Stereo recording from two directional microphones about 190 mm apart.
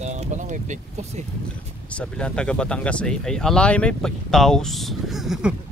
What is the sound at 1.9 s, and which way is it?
Speech, 5° left (ahead or behind).